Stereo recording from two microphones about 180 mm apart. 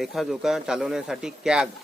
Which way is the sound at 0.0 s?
Centre (ahead or behind).